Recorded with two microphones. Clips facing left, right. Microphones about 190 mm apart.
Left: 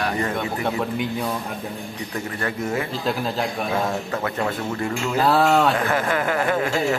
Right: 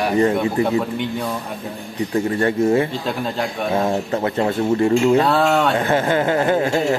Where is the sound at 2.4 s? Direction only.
30° right (ahead or behind).